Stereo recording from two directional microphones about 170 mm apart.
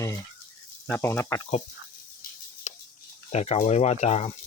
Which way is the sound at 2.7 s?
45° left (ahead or behind).